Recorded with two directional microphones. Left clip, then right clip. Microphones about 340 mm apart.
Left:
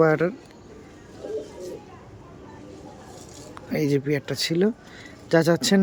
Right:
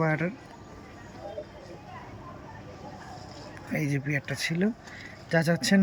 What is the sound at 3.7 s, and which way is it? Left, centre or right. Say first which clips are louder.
Speech: left 7 dB; centre.